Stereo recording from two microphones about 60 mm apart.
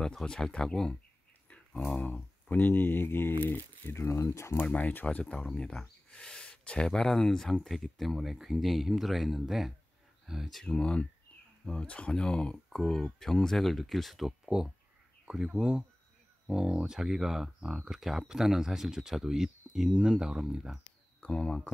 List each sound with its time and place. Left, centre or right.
0.0 s speech: centre
2.5 s speech: left
4.7 s speech: left; by 10.6 s centre
10.6 s speech: centre
21.2 s speech: centre